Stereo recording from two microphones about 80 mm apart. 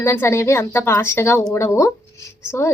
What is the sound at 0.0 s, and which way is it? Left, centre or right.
A woman's voice, left.